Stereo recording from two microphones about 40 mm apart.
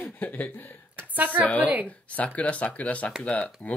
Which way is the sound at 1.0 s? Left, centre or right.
Right.